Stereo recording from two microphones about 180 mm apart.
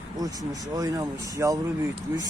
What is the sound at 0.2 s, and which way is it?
Speech, 20° right (ahead or behind).